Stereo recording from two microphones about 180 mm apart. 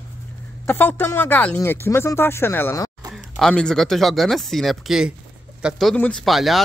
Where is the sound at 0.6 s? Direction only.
10° left (ahead or behind).